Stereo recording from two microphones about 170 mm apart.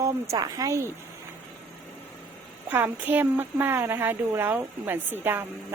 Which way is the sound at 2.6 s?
10° right (ahead or behind).